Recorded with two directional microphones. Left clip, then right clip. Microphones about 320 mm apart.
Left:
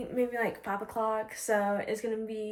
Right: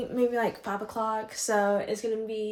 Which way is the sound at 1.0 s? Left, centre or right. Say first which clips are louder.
Right 1 dB; centre.